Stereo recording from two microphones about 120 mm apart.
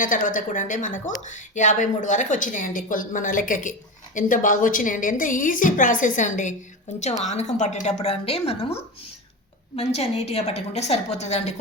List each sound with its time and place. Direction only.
0.1 s a woman's voice: 90° left
7.2 s a woman's voice: 75° left (ahead or behind); by 8.5 s 55° left (ahead or behind)
9.7 s a woman's voice: 60° left (ahead or behind)